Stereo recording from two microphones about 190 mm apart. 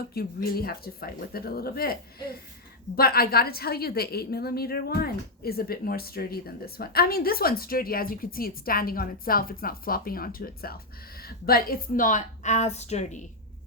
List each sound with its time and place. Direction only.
0.1 s a woman's voice: 55° left (ahead or behind); by 13.2 s 40° left (ahead or behind)